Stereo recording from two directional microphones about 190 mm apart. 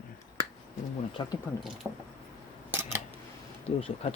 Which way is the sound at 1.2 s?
20° left (ahead or behind).